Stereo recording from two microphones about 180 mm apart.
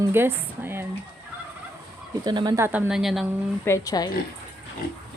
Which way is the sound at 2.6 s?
10° right (ahead or behind).